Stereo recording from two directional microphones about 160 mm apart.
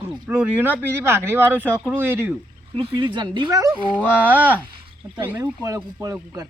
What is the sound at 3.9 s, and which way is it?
A man's voice, 10° right (ahead or behind).